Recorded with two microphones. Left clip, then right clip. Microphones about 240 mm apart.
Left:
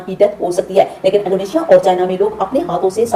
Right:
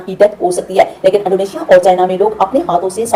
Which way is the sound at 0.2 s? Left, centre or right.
Centre.